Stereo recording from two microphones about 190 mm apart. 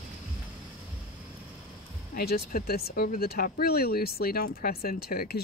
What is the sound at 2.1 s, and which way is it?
Speech, 55° left (ahead or behind).